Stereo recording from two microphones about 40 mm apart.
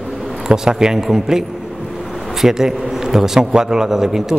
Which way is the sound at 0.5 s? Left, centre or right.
Centre.